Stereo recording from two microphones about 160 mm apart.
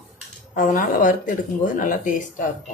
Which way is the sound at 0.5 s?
60° left (ahead or behind).